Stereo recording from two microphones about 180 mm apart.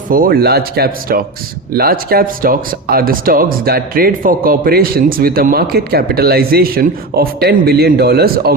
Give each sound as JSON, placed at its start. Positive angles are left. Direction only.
{"t": 0.1, "sound": "speech", "side_deg": -55}